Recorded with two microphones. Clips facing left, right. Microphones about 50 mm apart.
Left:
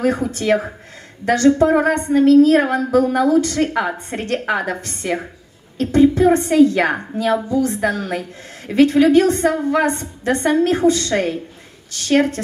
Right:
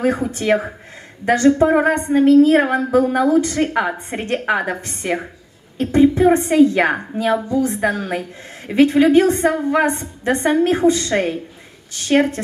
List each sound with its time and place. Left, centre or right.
0.0 s a woman's voice: right